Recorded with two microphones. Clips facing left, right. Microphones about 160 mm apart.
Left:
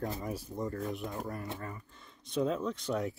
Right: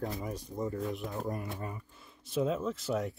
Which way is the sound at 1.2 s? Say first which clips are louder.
Right 2 dB; 20° right (ahead or behind).